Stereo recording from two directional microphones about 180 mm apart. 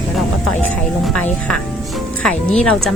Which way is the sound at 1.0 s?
5° left (ahead or behind).